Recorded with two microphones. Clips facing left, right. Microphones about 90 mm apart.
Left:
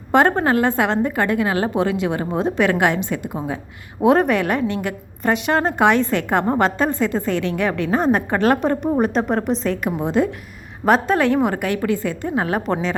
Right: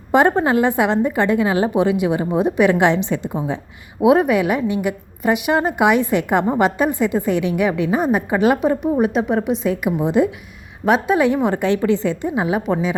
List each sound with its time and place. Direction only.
0.1 s a woman's voice: 15° right (ahead or behind)
4.0 s a woman's voice: 10° right (ahead or behind)
11.6 s a woman's voice: 25° right (ahead or behind)
12.4 s a woman's voice: 10° right (ahead or behind)